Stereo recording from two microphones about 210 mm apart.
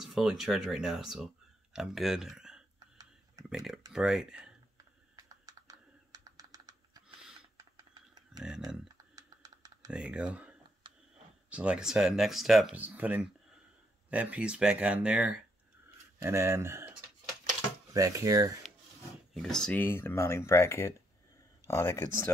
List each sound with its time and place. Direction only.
0.0 s speech: centre (ahead or behind)
5.1 s typing: 15° right (ahead or behind)
8.4 s speech: 5° right (ahead or behind)
8.8 s typing: 20° right (ahead or behind)
9.8 s speech: 5° right (ahead or behind)
11.5 s speech: 5° right (ahead or behind)
17.9 s speech: 15° right (ahead or behind)
19.3 s speech: centre (ahead or behind)